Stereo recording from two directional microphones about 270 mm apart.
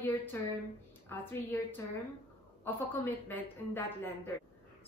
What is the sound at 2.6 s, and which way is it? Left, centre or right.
A woman's voice, centre.